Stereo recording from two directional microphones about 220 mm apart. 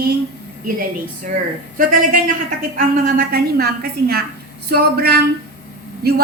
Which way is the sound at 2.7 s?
40° right (ahead or behind).